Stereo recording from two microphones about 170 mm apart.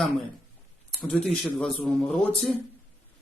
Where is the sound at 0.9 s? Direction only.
Centre (ahead or behind).